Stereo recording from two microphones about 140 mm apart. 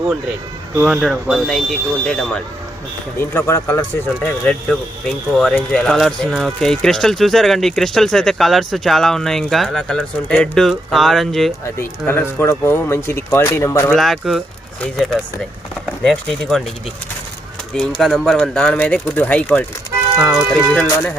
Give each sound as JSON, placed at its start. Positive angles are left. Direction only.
{"t": 0.9, "sound": "speech", "side_deg": -5}
{"t": 3.2, "sound": "speech", "side_deg": 15}
{"t": 5.4, "sound": "speech", "side_deg": 5}
{"t": 11.8, "sound": "speech", "side_deg": 15}
{"t": 13.9, "sound": "speech", "side_deg": 0}
{"t": 17.7, "sound": "speech", "side_deg": 5}
{"t": 20.1, "sound": "speech", "side_deg": 0}